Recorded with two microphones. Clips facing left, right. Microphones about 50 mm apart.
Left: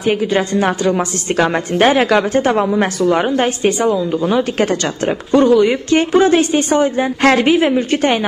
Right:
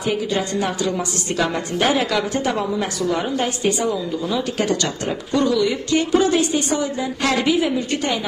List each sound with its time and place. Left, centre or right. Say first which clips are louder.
0.0 s a woman's voice: left 6 dB; left